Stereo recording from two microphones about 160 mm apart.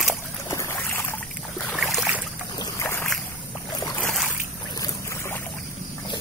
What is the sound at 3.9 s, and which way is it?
Boat, 10° left (ahead or behind).